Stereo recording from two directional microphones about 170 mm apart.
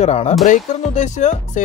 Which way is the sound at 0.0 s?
40° left (ahead or behind).